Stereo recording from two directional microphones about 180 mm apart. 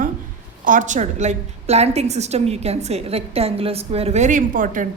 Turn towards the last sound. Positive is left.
turn(degrees=-45)  # may be behind; listen again after turning